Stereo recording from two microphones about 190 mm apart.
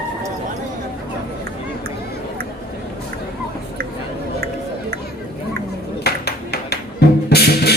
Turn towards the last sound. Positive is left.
turn(degrees=55)  # may be behind; listen again after turning